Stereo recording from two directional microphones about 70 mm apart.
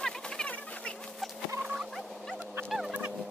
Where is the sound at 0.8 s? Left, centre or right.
Centre.